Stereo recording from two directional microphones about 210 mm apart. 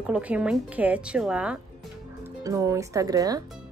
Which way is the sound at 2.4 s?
15° right (ahead or behind).